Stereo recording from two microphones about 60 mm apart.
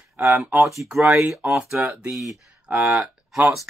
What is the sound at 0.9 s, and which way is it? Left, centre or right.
Speech, centre.